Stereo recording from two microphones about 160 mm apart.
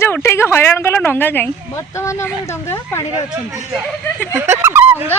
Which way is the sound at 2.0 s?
20° left (ahead or behind).